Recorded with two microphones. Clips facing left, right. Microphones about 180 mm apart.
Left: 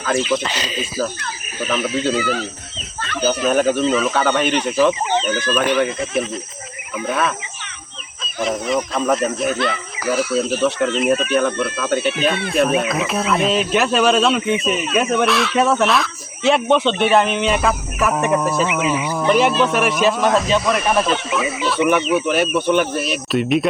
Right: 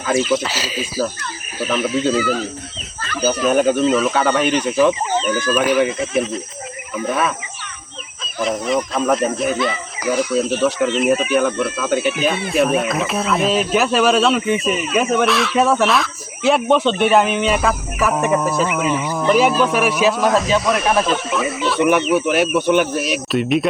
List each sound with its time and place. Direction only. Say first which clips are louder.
0.3 s speech: right 1 dB; 5° right (ahead or behind)
8.4 s speech: right 1 dB; centre (ahead or behind)
10.0 s speech: right 1 dB; 15° right (ahead or behind)
10.4 s speech: right 1 dB; centre (ahead or behind)
22.1 s speech: right 1 dB; 10° right (ahead or behind)
23.3 s speech: left 1 dB; centre (ahead or behind)